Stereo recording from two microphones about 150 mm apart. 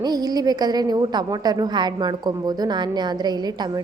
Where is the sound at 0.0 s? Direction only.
25° right (ahead or behind).